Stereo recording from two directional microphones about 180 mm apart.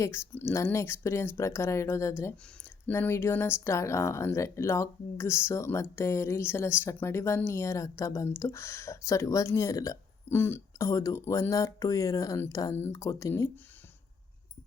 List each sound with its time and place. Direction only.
0.0 s speech: 15° left (ahead or behind)